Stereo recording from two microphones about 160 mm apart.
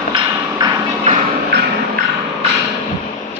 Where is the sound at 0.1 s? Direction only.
25° right (ahead or behind).